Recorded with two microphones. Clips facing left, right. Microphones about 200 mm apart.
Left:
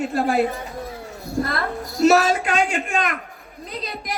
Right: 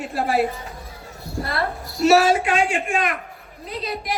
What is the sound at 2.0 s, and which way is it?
A man's voice, 40° left (ahead or behind).